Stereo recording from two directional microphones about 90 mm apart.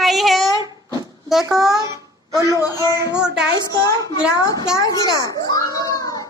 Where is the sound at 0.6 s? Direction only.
45° right (ahead or behind).